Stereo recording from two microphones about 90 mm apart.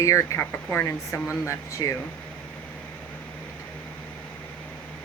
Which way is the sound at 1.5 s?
40° left (ahead or behind).